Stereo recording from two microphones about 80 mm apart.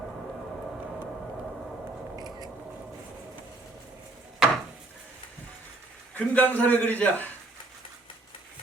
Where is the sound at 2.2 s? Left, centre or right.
Right.